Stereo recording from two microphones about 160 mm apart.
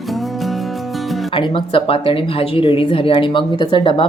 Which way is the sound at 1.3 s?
35° left (ahead or behind).